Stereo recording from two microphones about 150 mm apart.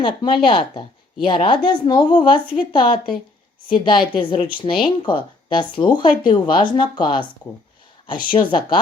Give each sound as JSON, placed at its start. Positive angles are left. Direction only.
{"t": 0.0, "sound": "a woman's voice", "side_deg": 35}